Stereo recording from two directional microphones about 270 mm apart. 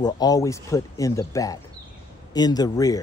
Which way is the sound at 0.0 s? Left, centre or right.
Centre.